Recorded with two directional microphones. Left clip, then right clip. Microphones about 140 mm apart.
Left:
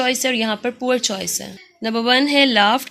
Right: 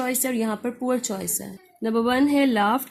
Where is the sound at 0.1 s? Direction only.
25° left (ahead or behind).